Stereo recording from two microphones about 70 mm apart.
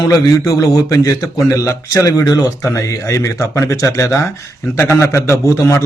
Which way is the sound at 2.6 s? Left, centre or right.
Left.